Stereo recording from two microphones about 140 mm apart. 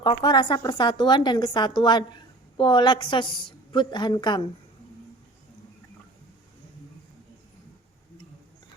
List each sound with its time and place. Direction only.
0.0 s a woman's voice: 30° left (ahead or behind)